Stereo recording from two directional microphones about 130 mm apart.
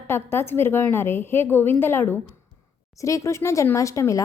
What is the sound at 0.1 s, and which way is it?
A woman's voice, 20° left (ahead or behind).